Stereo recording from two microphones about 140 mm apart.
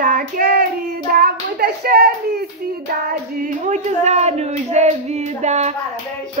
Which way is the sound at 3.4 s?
65° right (ahead or behind).